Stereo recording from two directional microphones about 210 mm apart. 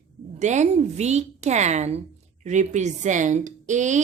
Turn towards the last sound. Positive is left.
turn(degrees=-35)  # may be behind; listen again after turning